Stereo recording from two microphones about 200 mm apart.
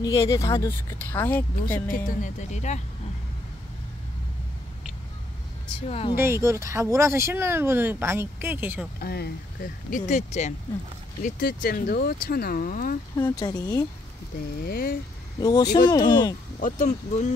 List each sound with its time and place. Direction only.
0.0 s speech: 20° left (ahead or behind)
1.9 s speech: 45° left (ahead or behind)
5.9 s speech: 30° left (ahead or behind)
6.1 s speech: 15° right (ahead or behind)
9.0 s speech: 50° left (ahead or behind)
13.1 s speech: 20° left (ahead or behind)
14.6 s speech: 50° left (ahead or behind)
15.4 s speech: 20° left (ahead or behind)
16.5 s speech: 40° left (ahead or behind)